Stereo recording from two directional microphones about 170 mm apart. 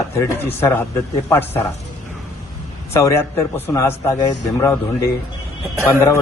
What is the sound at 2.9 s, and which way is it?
A man's voice, 15° left (ahead or behind).